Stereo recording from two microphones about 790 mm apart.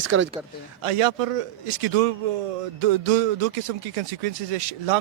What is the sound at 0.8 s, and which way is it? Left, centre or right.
Speech, right.